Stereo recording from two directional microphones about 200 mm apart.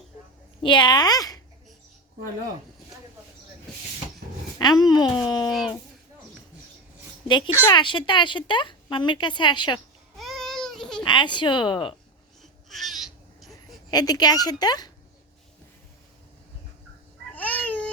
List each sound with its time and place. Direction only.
0.6 s speech: 25° left (ahead or behind)
4.5 s speech: 20° left (ahead or behind)
5.5 s speech: centre (ahead or behind)
7.3 s speech: 25° left (ahead or behind)
10.2 s baby cry: centre (ahead or behind)
11.0 s speech: 25° left (ahead or behind)
12.4 s babbling: centre (ahead or behind)
13.5 s speech: 20° left (ahead or behind)
17.3 s babbling: 10° left (ahead or behind)